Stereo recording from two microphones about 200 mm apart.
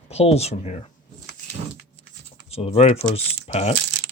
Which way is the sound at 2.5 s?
30° left (ahead or behind).